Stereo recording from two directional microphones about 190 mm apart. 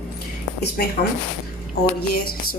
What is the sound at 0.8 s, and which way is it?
Speech, 55° left (ahead or behind).